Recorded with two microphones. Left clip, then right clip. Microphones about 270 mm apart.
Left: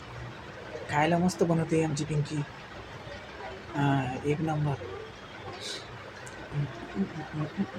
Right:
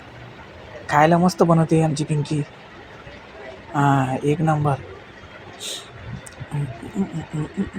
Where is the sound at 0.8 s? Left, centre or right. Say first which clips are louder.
Right 11 dB; right.